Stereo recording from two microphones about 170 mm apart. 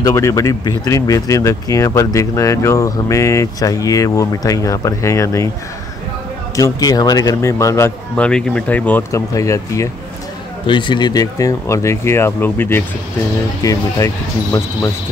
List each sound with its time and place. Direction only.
0.0 s speech: 20° left (ahead or behind)
6.5 s speech: 20° left (ahead or behind)